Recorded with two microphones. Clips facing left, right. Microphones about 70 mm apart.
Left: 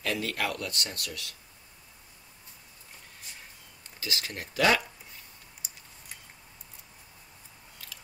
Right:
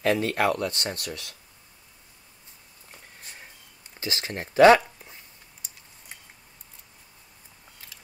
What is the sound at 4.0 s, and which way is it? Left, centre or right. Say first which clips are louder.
Speech: right 4 dB; right.